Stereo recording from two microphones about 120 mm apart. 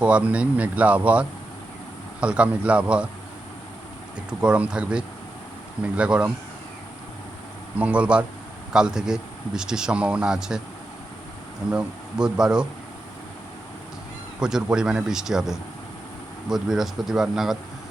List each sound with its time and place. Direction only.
0.0 s speech: 10° right (ahead or behind)
4.3 s speech: 5° right (ahead or behind)
7.8 s speech: 10° right (ahead or behind)
11.7 s speech: 10° right (ahead or behind)
14.3 s speech: 5° right (ahead or behind)